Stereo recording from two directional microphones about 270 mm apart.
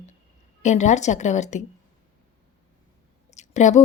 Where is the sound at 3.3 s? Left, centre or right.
Left.